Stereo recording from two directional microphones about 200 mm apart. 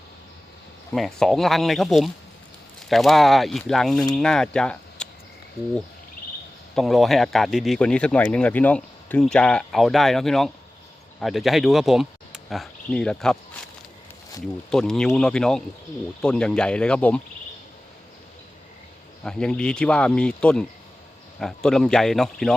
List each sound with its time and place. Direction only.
0.9 s speech: centre (ahead or behind)
6.7 s speech: centre (ahead or behind)
14.3 s speech: 15° left (ahead or behind)
14.7 s speech: 5° left (ahead or behind)
19.2 s speech: 5° left (ahead or behind)